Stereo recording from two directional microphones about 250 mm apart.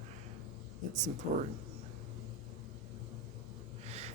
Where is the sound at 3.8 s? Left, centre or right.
Right.